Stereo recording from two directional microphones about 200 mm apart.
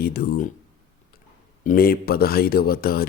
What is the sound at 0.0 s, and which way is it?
Speech, 50° left (ahead or behind).